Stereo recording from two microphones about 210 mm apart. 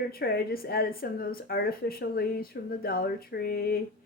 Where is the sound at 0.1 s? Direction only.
45° left (ahead or behind).